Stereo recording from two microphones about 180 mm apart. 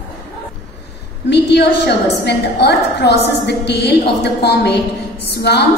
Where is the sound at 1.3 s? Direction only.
65° left (ahead or behind).